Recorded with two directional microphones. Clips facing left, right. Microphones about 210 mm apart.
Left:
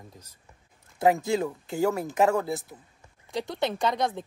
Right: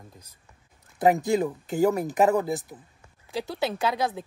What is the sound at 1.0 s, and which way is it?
Speech, 20° right (ahead or behind).